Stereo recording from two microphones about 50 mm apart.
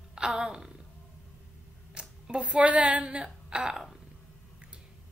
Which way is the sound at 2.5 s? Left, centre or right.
Right.